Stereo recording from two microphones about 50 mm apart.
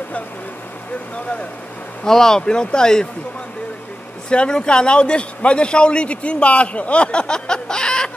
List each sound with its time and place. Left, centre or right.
2.0 s speech: centre
4.3 s a man's voice: centre